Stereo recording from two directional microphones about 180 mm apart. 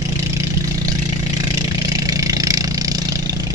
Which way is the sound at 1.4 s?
20° right (ahead or behind).